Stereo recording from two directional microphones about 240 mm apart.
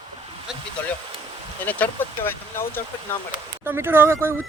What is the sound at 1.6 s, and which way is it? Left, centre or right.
Speech, centre.